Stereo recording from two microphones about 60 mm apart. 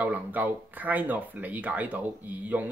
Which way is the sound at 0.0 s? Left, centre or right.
Right.